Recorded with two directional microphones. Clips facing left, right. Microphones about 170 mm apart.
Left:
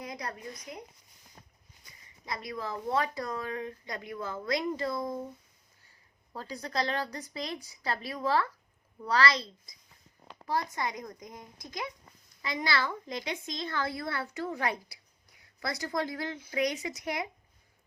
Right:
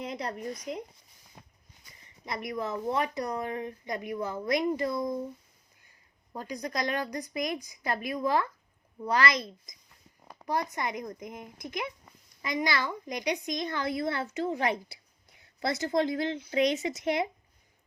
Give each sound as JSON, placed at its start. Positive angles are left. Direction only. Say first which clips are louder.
{"t": 0.0, "sound": "a woman's voice", "louder": "right 5 dB", "side_deg": -25}
{"t": 2.2, "sound": "a woman's voice", "louder": "right 4 dB", "side_deg": -20}
{"t": 6.3, "sound": "a woman's voice", "louder": "even", "side_deg": -15}